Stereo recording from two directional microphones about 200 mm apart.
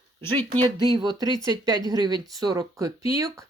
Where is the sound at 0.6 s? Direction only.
20° right (ahead or behind).